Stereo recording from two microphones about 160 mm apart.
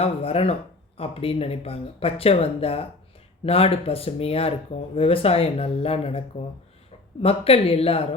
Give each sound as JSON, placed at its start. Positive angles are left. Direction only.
{"t": 0.0, "sound": "speech", "side_deg": 40}